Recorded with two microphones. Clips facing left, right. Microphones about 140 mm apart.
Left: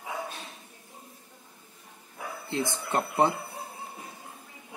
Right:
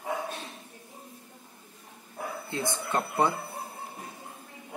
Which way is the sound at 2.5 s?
25° left (ahead or behind).